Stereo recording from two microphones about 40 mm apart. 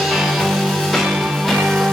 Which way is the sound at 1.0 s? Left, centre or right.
Centre.